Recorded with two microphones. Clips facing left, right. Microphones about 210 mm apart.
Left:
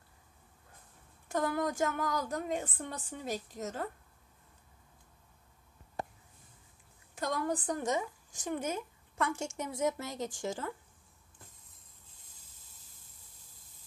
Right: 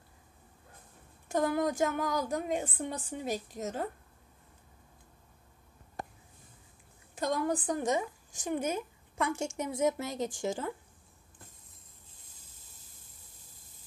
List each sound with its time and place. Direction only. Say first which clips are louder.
1.3 s a woman's voice: right 3 dB; 20° right (ahead or behind)
7.2 s a woman's voice: right 3 dB; 20° right (ahead or behind)